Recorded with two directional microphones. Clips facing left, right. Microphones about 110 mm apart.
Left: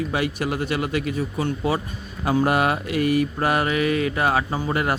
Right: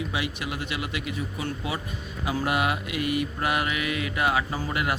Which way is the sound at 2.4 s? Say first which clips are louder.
Left 5 dB; 45° left (ahead or behind).